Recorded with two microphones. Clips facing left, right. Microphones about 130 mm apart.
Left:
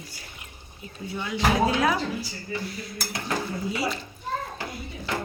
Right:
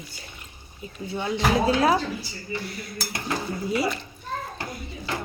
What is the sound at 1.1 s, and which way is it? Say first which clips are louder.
Speech: right 2 dB; 30° right (ahead or behind).